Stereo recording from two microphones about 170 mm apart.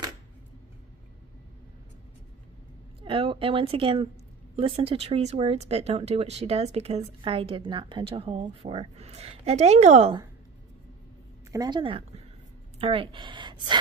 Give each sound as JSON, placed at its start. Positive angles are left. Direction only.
{"t": 3.0, "sound": "speech", "side_deg": -30}
{"t": 11.5, "sound": "speech", "side_deg": -25}